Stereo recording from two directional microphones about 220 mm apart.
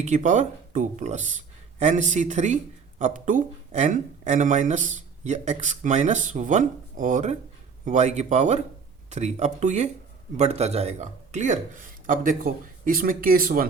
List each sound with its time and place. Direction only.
0.0 s speech: 30° right (ahead or behind)